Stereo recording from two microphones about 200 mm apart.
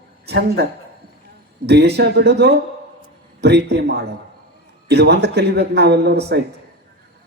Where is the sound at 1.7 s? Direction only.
55° right (ahead or behind).